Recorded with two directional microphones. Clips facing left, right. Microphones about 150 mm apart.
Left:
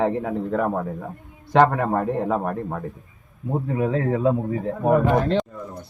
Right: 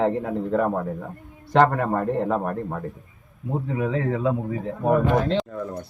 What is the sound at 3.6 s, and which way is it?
A man's voice, 45° left (ahead or behind).